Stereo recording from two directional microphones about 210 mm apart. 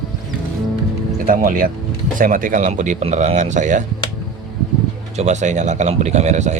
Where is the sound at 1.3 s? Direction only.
40° right (ahead or behind).